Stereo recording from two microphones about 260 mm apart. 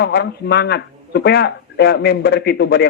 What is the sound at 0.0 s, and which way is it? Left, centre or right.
Speech, left.